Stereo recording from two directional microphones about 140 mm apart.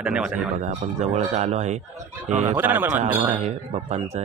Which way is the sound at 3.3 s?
55° right (ahead or behind).